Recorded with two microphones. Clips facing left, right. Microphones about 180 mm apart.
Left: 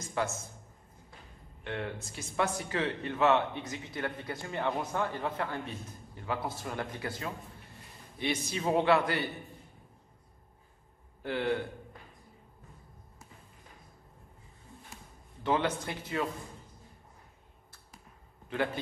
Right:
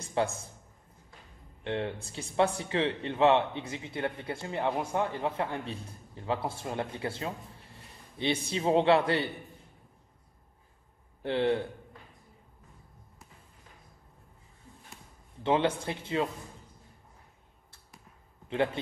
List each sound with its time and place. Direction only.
0.0 s a man's voice: 30° right (ahead or behind)
1.6 s speech: 25° right (ahead or behind)
11.2 s speech: 25° right (ahead or behind)
15.4 s speech: 25° right (ahead or behind)